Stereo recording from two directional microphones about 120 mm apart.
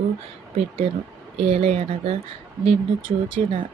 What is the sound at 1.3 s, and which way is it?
Speech, 55° right (ahead or behind).